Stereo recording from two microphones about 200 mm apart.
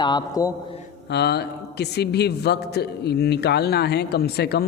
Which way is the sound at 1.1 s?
55° left (ahead or behind).